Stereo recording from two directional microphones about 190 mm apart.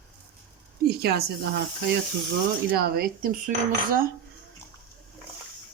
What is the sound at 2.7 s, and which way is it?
Speech, 55° right (ahead or behind).